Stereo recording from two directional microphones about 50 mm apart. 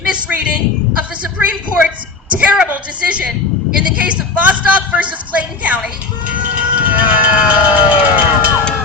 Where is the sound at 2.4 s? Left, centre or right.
Right.